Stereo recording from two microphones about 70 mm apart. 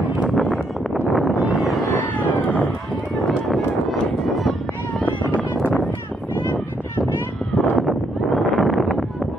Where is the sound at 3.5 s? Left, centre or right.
Centre.